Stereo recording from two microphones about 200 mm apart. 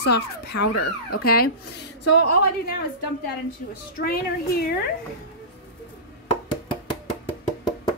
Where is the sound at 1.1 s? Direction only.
50° left (ahead or behind).